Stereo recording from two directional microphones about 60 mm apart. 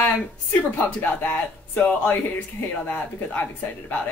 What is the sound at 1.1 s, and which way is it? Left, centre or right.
Speech, left.